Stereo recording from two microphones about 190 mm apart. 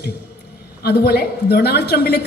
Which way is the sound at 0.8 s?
55° left (ahead or behind).